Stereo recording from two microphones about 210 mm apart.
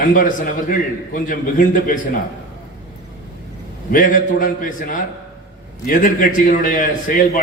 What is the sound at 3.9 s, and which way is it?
A man's voice, 40° left (ahead or behind).